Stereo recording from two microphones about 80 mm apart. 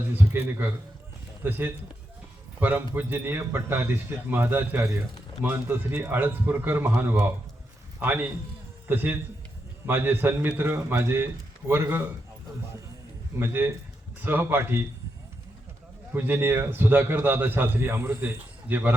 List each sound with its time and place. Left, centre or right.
0.1 s a man's voice: right
4.8 s speech: right
5.4 s a man's voice: right
13.4 s a man's voice: right
16.1 s a man's voice: right
18.2 s speech: right